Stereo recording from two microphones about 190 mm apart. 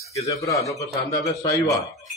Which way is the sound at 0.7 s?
15° left (ahead or behind).